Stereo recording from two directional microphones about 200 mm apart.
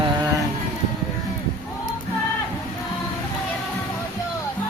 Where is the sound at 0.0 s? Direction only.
20° right (ahead or behind).